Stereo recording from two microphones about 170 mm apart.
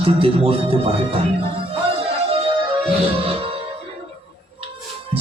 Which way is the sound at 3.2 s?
35° right (ahead or behind).